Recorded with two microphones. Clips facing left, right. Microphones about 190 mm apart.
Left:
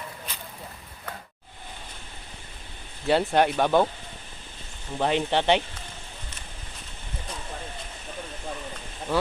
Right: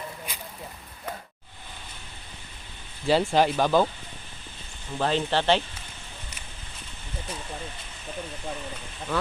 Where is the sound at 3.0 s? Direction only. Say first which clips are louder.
Even; centre (ahead or behind).